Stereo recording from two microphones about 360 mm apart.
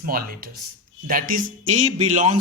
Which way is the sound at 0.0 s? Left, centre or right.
Right.